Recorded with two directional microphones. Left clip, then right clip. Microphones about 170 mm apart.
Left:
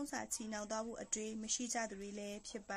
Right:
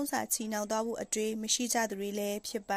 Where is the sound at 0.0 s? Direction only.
40° right (ahead or behind).